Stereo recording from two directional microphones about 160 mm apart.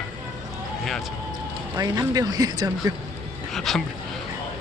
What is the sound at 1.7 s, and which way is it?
Speech, 20° right (ahead or behind).